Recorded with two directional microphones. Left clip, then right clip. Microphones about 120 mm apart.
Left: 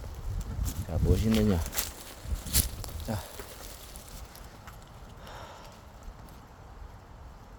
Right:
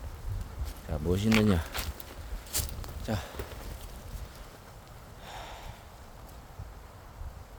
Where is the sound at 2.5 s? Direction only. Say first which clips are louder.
Left 4 dB; 70° left (ahead or behind).